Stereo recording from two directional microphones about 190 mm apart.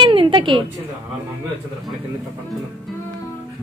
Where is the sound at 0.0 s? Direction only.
25° right (ahead or behind).